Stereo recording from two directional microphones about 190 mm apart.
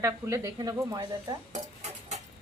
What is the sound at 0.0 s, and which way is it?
Speech, 15° right (ahead or behind).